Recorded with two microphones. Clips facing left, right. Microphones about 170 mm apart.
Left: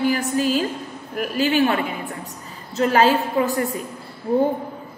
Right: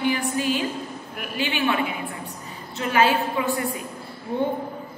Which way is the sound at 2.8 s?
40° left (ahead or behind).